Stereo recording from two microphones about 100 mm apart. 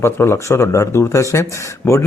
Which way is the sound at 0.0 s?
25° left (ahead or behind).